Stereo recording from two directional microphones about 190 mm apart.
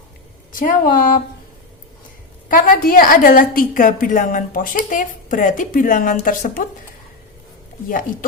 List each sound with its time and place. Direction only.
0.5 s a woman's voice: 45° left (ahead or behind)
2.5 s a woman's voice: 50° left (ahead or behind)
7.9 s a woman's voice: 45° left (ahead or behind)